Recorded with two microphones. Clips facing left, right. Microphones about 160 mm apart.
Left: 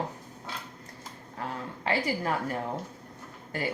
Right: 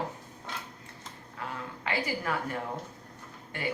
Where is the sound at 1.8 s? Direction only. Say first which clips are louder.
Left 4 dB; 35° left (ahead or behind).